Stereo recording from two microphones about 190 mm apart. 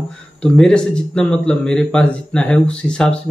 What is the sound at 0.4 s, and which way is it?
A man's voice, 5° left (ahead or behind).